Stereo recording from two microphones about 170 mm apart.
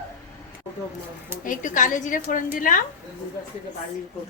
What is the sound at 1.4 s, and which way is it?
A woman's voice, 50° left (ahead or behind).